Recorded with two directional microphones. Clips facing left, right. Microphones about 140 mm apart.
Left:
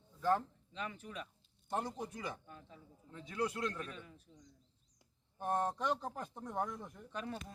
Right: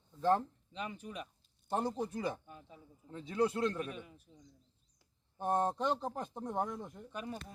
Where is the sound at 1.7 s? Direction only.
30° right (ahead or behind).